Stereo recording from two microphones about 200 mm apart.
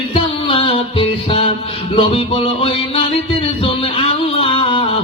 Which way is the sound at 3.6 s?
30° left (ahead or behind).